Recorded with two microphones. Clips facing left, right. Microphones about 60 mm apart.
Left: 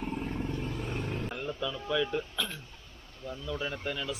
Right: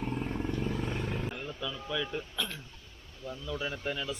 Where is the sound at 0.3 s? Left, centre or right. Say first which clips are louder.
Right 2 dB; centre.